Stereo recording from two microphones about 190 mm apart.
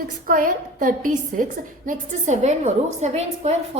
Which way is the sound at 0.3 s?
45° right (ahead or behind).